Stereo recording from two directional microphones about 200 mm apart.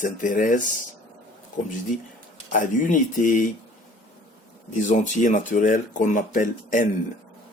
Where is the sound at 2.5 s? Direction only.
40° left (ahead or behind).